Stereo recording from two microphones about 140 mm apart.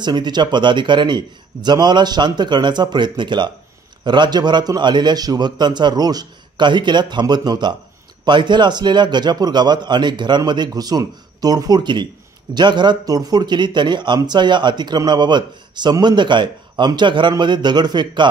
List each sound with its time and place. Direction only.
0.0 s speech: 30° right (ahead or behind)